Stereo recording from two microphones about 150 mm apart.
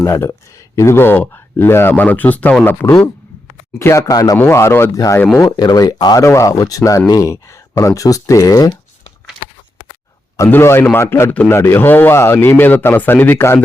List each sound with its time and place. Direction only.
0.0 s a man's voice: 20° left (ahead or behind)
10.3 s a man's voice: 20° left (ahead or behind)